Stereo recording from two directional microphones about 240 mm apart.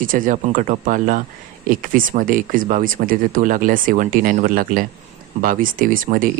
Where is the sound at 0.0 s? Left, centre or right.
Right.